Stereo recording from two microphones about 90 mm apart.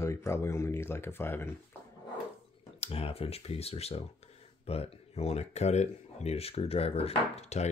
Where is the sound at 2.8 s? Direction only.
90° left.